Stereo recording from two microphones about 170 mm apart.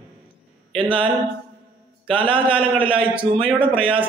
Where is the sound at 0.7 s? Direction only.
30° right (ahead or behind).